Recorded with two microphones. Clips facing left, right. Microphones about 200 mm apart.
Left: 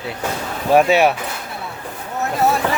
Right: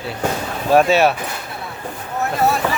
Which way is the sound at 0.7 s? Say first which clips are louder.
Even; 15° left (ahead or behind).